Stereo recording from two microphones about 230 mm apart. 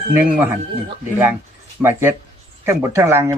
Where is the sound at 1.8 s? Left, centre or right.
Centre.